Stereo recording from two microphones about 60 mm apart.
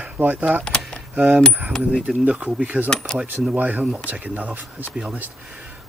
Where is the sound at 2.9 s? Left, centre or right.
Centre.